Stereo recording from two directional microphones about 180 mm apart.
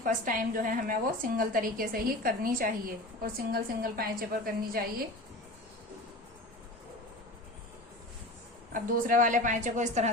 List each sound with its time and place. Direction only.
0.0 s a woman's voice: 50° right (ahead or behind)
8.7 s a woman's voice: 50° right (ahead or behind)